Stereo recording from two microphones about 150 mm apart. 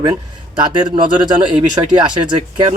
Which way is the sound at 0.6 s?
30° right (ahead or behind).